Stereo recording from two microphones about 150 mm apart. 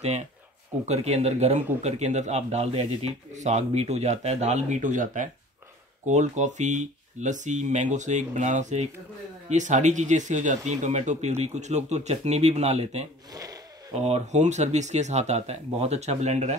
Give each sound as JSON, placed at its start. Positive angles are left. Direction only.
{"t": 0.8, "sound": "speech", "side_deg": -45}
{"t": 13.3, "sound": "speech", "side_deg": -25}
{"t": 13.9, "sound": "speech", "side_deg": -45}